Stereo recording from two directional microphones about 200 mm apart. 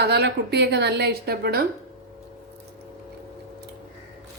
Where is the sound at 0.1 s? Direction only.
55° right (ahead or behind).